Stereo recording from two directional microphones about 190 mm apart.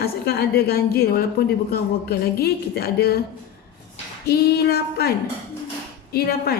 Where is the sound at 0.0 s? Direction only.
55° left (ahead or behind).